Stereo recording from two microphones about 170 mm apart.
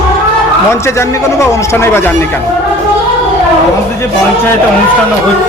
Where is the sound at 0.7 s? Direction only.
15° left (ahead or behind).